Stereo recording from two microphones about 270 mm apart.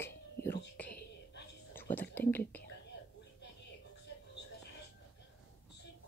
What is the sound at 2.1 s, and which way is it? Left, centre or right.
Speech, centre.